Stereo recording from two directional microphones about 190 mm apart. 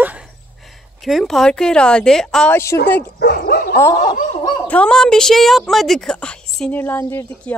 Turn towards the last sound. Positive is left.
turn(degrees=10)  # may be behind; listen again after turning